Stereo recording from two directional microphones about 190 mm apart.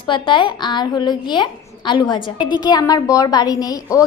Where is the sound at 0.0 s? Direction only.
25° left (ahead or behind).